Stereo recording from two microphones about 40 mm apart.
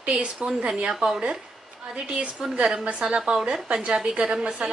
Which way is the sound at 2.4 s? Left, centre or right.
Centre.